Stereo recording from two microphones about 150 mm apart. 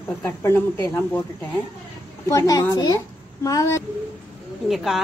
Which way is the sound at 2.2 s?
20° left (ahead or behind).